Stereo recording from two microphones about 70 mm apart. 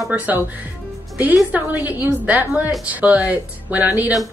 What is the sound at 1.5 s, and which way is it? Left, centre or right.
Speech, right.